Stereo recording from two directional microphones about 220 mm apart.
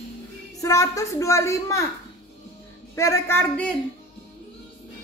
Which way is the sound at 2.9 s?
15° left (ahead or behind).